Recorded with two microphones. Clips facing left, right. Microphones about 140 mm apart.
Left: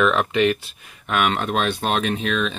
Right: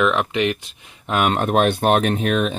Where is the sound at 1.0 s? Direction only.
35° right (ahead or behind); by 2.5 s 50° right (ahead or behind).